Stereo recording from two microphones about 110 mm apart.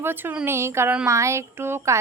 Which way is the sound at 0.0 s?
20° right (ahead or behind).